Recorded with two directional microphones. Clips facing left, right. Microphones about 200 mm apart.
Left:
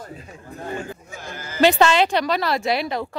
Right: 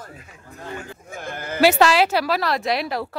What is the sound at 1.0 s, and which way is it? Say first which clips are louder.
Speech: right 4 dB; 55° right (ahead or behind).